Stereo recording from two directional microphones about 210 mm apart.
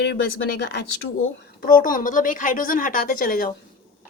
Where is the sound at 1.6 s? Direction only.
40° left (ahead or behind).